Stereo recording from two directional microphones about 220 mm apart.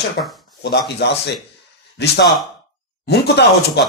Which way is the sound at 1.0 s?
50° left (ahead or behind).